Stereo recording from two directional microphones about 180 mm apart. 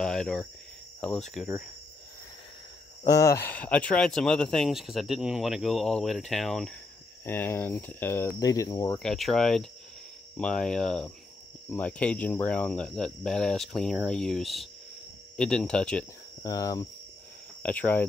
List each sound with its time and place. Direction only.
0.0 s cricket: 5° left (ahead or behind)
1.4 s speech: centre (ahead or behind)
3.1 s speech: 15° left (ahead or behind); by 6.7 s centre (ahead or behind)
7.2 s speech: 15° left (ahead or behind)
9.0 s speech: centre (ahead or behind)
16.4 s cricket: 20° left (ahead or behind)
17.6 s speech: 10° left (ahead or behind)